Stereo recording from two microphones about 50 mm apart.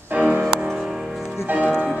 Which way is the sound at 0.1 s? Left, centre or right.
Right.